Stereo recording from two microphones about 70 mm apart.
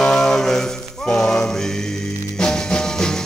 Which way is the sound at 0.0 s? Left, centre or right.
Centre.